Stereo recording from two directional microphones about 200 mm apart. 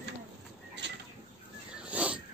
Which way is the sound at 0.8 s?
65° right (ahead or behind).